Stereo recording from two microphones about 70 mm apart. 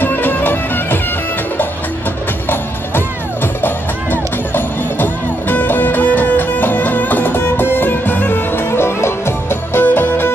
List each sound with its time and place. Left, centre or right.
0.0 s music: left
3.6 s music: left